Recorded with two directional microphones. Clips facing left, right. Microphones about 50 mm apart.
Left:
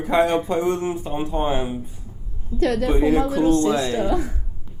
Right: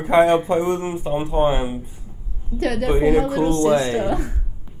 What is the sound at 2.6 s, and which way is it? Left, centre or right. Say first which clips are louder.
A woman's voice: even; right.